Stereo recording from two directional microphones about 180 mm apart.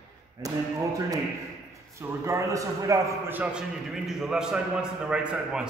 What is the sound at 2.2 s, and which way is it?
A man's voice, 15° right (ahead or behind).